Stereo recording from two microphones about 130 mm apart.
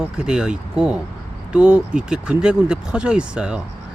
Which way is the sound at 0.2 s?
5° right (ahead or behind).